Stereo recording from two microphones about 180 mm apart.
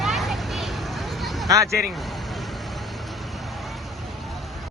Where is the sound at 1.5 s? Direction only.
15° right (ahead or behind).